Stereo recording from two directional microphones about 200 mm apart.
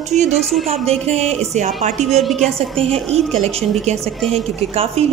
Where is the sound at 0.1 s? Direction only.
35° right (ahead or behind).